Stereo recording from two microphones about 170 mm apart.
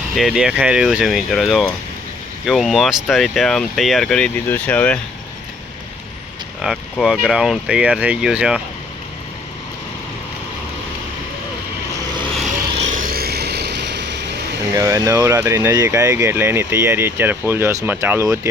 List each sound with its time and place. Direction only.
0.2 s speech: centre (ahead or behind)
6.6 s speech: centre (ahead or behind)
12.9 s vehicle: 55° right (ahead or behind); by 14.1 s 90° right
14.8 s speech: 20° right (ahead or behind)